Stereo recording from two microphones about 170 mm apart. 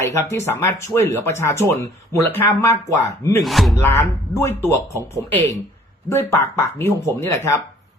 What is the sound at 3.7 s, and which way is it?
Speech, 15° left (ahead or behind).